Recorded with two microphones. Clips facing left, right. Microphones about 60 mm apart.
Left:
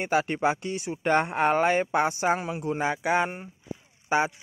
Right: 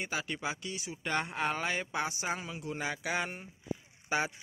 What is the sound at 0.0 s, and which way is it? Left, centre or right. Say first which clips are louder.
Speech: left 11 dB; left.